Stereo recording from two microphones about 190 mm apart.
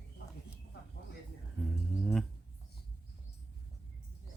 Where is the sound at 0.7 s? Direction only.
60° left (ahead or behind).